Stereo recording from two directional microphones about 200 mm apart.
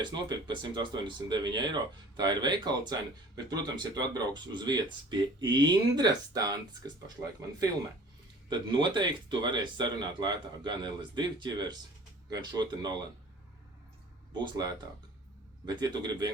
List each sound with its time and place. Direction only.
0.0 s speech: 20° right (ahead or behind)
8.4 s speech: 20° right (ahead or behind)
14.3 s speech: 20° right (ahead or behind)